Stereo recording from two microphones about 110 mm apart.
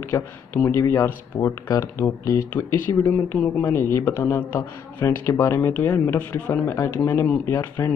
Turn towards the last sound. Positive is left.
turn(degrees=25)  # may be behind; listen again after turning